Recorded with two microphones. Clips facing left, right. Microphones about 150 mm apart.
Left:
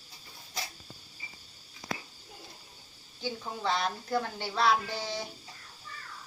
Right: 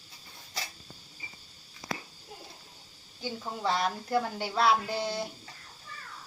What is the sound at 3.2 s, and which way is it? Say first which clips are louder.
Speech: right 1 dB; 5° right (ahead or behind).